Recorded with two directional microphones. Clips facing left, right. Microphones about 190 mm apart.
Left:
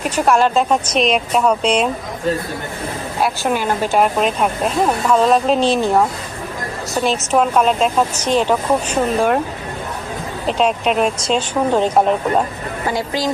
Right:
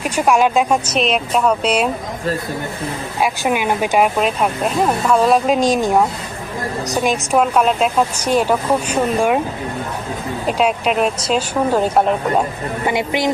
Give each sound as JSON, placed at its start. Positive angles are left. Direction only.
{"t": 0.0, "sound": "speech", "side_deg": -10}
{"t": 3.2, "sound": "speech", "side_deg": -10}
{"t": 4.2, "sound": "speech", "side_deg": 0}
{"t": 10.4, "sound": "speech", "side_deg": -5}
{"t": 13.0, "sound": "speech", "side_deg": -20}